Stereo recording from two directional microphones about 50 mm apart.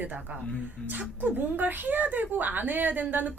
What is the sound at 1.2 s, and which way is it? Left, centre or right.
A woman's voice, right.